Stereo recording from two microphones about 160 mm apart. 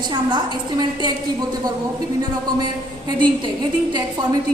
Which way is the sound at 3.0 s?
25° right (ahead or behind).